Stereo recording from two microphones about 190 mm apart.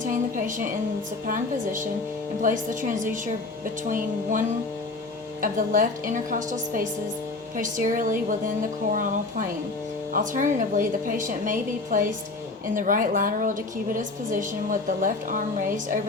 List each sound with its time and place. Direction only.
0.0 s a sound: 40° right (ahead or behind)
1.3 s a woman's voice: 45° right (ahead or behind)
10.1 s a woman's voice: 45° right (ahead or behind)